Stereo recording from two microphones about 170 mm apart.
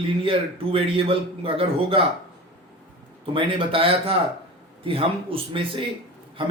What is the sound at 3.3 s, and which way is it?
Speech, 30° right (ahead or behind).